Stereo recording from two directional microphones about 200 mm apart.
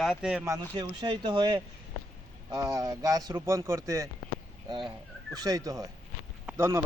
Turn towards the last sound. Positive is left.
turn(degrees=-15)  # may be behind; listen again after turning